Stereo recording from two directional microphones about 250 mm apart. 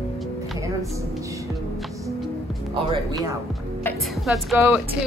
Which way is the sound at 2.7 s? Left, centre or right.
Centre.